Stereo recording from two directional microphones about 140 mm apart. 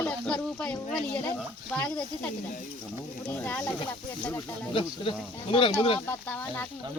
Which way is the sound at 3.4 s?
10° left (ahead or behind).